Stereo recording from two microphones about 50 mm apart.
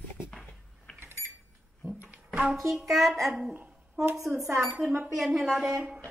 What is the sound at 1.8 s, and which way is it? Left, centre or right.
Music, centre.